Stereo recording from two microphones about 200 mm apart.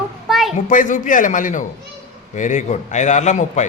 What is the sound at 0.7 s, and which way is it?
Speech, 40° left (ahead or behind).